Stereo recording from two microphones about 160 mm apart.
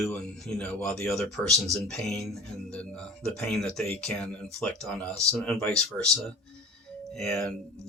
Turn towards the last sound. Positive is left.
turn(degrees=5)  # may be behind; listen again after turning